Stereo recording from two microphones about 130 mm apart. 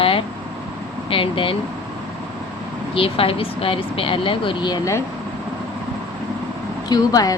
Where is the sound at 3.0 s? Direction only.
45° left (ahead or behind).